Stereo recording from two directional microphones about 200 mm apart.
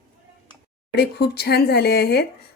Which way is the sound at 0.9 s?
55° left (ahead or behind).